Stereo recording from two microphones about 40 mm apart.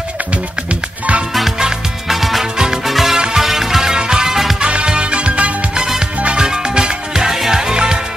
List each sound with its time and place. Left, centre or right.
2.0 s music: centre
2.5 s music: centre
2.8 s music: centre
4.6 s music: right